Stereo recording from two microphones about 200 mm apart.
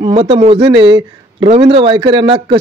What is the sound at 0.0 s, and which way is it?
Speech, 30° right (ahead or behind).